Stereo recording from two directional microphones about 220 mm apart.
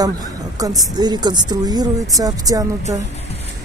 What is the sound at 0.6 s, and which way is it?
A woman's voice, 15° right (ahead or behind).